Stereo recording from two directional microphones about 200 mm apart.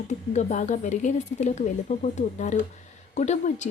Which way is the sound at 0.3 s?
35° left (ahead or behind).